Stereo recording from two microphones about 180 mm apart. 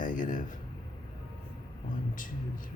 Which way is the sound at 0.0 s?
45° left (ahead or behind).